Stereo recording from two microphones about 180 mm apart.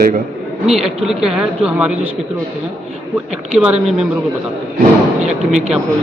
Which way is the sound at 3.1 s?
10° right (ahead or behind).